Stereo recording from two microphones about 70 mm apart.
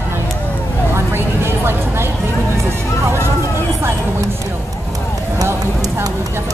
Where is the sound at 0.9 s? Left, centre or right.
Right.